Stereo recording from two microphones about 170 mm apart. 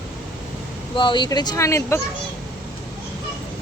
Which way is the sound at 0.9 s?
30° left (ahead or behind).